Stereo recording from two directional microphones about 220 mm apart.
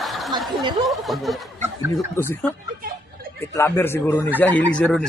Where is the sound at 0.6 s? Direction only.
20° right (ahead or behind).